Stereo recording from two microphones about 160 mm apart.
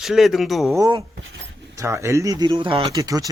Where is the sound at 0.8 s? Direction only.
20° right (ahead or behind).